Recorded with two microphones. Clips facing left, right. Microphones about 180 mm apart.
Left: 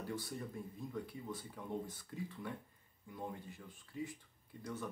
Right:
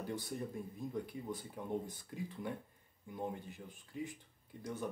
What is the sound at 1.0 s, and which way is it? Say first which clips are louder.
Speech: right 3 dB; 15° right (ahead or behind).